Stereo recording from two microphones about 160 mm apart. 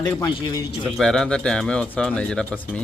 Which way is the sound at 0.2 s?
25° left (ahead or behind).